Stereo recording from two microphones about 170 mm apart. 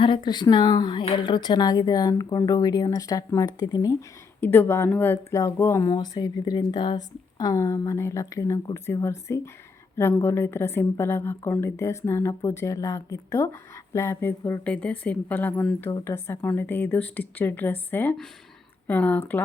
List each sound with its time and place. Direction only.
0.0 s a woman's voice: 30° left (ahead or behind); by 19.4 s 10° left (ahead or behind)